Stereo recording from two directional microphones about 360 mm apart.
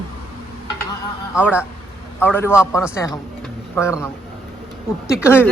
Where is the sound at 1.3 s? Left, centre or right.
Centre.